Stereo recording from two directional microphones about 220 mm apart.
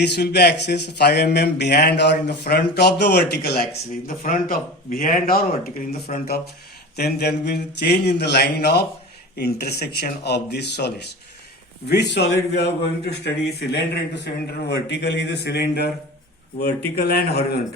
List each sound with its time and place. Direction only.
0.0 s speech: 50° left (ahead or behind)
4.0 s speech: 40° left (ahead or behind)